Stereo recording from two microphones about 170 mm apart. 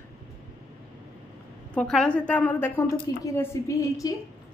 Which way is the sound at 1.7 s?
5° left (ahead or behind).